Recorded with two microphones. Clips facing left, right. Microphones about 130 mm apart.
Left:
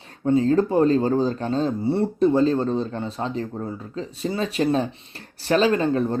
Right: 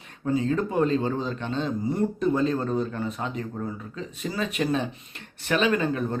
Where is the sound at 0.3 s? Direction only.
35° left (ahead or behind).